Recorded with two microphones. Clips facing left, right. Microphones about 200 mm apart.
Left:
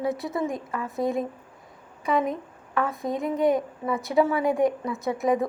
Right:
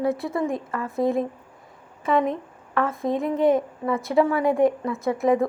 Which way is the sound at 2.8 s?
Centre (ahead or behind).